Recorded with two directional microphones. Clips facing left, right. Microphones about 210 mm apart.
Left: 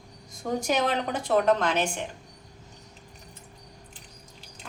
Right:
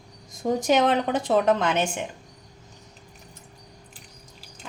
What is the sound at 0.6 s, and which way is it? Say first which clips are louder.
Speech: right 6 dB; 20° right (ahead or behind).